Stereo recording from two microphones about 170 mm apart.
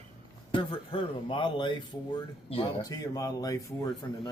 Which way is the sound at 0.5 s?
30° left (ahead or behind).